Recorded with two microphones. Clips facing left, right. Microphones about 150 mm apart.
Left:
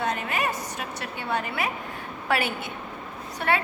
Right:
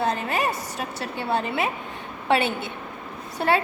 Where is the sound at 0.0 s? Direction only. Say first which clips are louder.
Right 3 dB; 30° right (ahead or behind).